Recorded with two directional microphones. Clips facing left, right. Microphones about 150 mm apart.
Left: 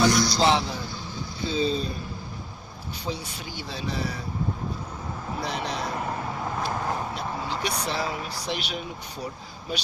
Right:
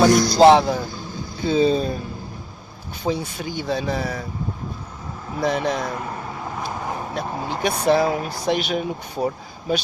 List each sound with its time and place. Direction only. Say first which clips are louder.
0.0 s a sound: right 8 dB; 50° right (ahead or behind)
1.5 s speech: right 8 dB; 50° right (ahead or behind)
3.1 s speech: right 10 dB; 50° right (ahead or behind)
5.4 s speech: right 10 dB; 50° right (ahead or behind)
7.1 s speech: right 4 dB; 50° right (ahead or behind)